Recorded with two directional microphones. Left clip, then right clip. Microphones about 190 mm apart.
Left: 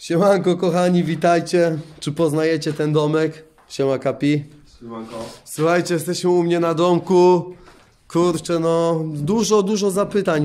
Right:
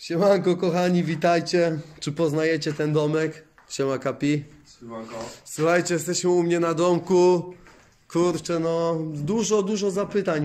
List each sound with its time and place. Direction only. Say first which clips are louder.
0.0 s a man's voice: left 4 dB; centre (ahead or behind)